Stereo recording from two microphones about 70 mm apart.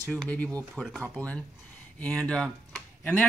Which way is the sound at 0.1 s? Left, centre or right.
Centre.